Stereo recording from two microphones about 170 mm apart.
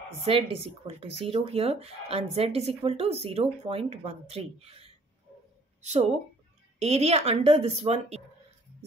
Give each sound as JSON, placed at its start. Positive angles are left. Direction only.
{"t": 0.2, "sound": "speech", "side_deg": -35}